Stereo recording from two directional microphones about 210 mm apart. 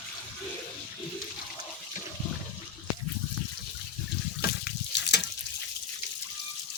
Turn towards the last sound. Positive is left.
turn(degrees=55)  # may be behind; listen again after turning